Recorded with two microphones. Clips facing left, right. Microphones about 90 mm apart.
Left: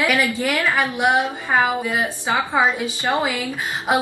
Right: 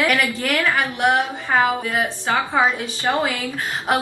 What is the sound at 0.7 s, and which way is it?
A woman's voice, 5° left (ahead or behind).